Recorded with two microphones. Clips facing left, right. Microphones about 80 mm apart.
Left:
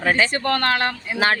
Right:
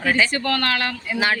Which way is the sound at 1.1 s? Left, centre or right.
Left.